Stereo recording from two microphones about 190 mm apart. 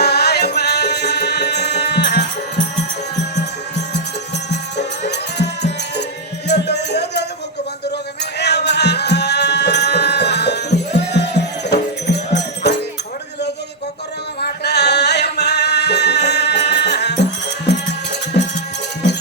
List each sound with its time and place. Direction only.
0.0 s music: 60° left (ahead or behind)
6.5 s music: 65° left (ahead or behind)
8.4 s music: 65° left (ahead or behind)
14.4 s music: 60° left (ahead or behind)
18.3 s music: 60° left (ahead or behind)